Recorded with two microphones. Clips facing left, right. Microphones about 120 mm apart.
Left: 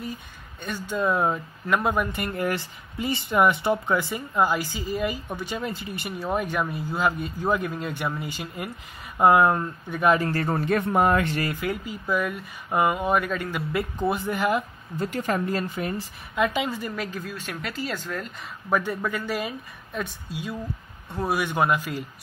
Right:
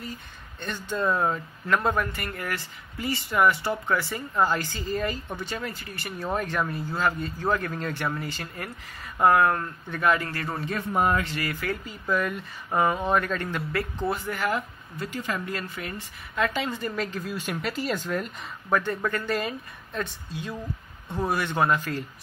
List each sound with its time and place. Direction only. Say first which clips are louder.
0.6 s speech: left 2 dB; 10° left (ahead or behind)
10.1 s speech: left 6 dB; 30° left (ahead or behind)
10.6 s speech: left 3 dB; 60° left (ahead or behind)
11.5 s speech: left 2 dB; 15° left (ahead or behind)
15.0 s speech: left 5 dB; 50° left (ahead or behind); by 16.0 s 30° left (ahead or behind)
16.3 s speech: left 2 dB; 15° left (ahead or behind)